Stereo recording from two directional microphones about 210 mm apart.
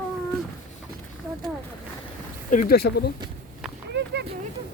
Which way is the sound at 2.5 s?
40° left (ahead or behind).